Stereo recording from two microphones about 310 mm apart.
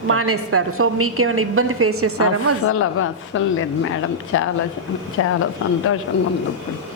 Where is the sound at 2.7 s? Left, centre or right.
Left.